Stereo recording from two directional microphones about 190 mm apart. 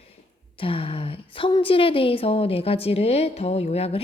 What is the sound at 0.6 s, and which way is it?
A woman's voice, 30° left (ahead or behind).